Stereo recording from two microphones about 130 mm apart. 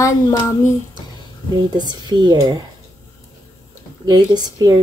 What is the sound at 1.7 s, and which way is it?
Speech, 35° right (ahead or behind).